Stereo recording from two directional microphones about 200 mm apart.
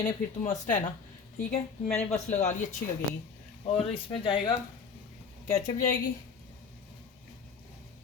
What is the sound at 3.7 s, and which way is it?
Speech, 30° left (ahead or behind).